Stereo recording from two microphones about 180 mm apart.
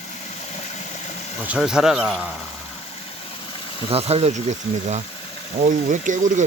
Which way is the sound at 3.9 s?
35° right (ahead or behind).